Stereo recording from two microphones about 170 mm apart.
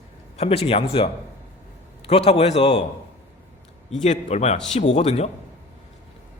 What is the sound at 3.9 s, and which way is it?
A man's voice, 45° left (ahead or behind).